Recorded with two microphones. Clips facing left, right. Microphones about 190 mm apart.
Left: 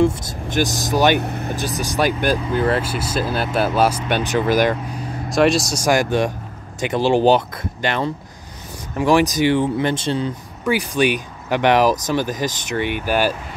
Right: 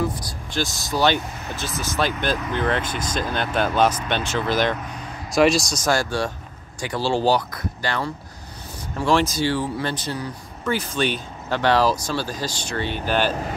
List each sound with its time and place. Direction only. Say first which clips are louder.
0.0 s speech: left 8 dB; 25° left (ahead or behind)
1.2 s speech: left 8 dB; 60° left (ahead or behind)
1.5 s speech: left 1 dB; 15° left (ahead or behind)
5.3 s speech: left 1 dB; centre (ahead or behind)
5.9 s speech: left 6 dB; 20° left (ahead or behind)
10.6 s speech: left 5 dB; 15° left (ahead or behind)